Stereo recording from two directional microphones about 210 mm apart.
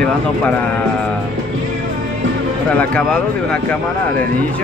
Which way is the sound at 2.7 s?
5° left (ahead or behind).